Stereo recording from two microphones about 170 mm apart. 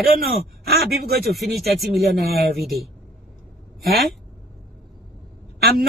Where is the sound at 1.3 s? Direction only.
Centre (ahead or behind).